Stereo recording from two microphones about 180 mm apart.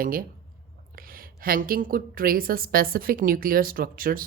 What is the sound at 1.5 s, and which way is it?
Speech, 55° right (ahead or behind).